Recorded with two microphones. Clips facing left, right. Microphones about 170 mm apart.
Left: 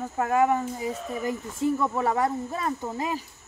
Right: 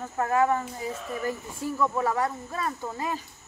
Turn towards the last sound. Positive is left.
turn(degrees=20)  # may be behind; listen again after turning